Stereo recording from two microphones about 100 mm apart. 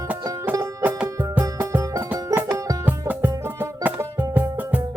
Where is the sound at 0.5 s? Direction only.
30° right (ahead or behind).